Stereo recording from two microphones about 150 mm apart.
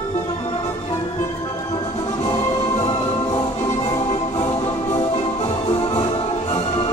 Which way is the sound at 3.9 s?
45° left (ahead or behind).